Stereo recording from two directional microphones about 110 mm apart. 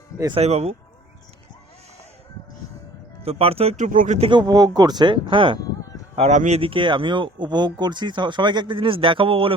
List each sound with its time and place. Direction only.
0.3 s speech: 75° right (ahead or behind)
3.2 s speech: 65° right (ahead or behind); by 4.3 s 80° right
4.3 s speech: 40° right (ahead or behind)
6.1 s speech: 80° right
6.7 s speech: 50° right (ahead or behind)